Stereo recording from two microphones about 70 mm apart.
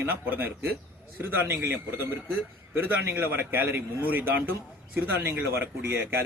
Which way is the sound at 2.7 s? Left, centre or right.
Right.